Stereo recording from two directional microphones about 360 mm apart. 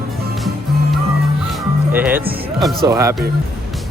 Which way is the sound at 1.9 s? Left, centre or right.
Centre.